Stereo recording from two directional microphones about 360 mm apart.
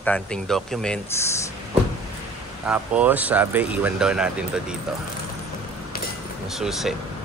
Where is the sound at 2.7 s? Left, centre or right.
Centre.